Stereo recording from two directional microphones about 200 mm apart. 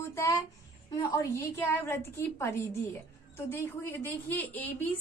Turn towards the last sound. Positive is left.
turn(degrees=10)  # may be behind; listen again after turning